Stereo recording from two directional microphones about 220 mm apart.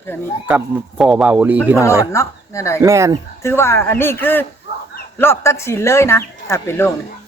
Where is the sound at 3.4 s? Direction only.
10° left (ahead or behind).